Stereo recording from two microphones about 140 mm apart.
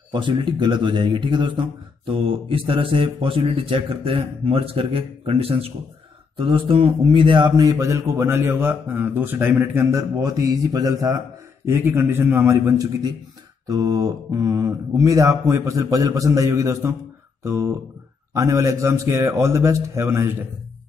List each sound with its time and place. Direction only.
0.1 s a man's voice: 35° right (ahead or behind)
7.7 s speech: 20° right (ahead or behind)
11.6 s a man's voice: 15° right (ahead or behind)